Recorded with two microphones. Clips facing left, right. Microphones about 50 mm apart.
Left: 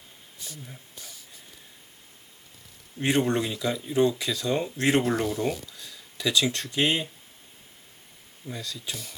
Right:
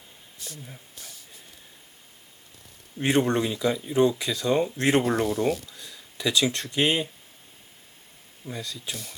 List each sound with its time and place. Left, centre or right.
0.3 s a sound: centre
3.0 s speech: centre
5.1 s speech: centre
5.6 s a sound: centre
6.2 s speech: centre
8.4 s speech: centre